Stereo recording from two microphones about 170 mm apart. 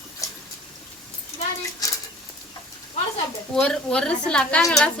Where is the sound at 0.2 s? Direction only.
20° left (ahead or behind).